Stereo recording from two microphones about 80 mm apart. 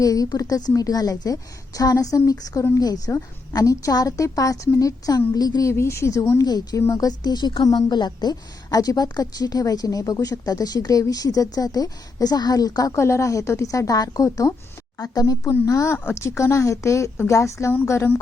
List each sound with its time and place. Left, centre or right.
0.0 s a woman's voice: left
5.6 s speech: left
6.4 s a woman's voice: left
13.0 s a woman's voice: left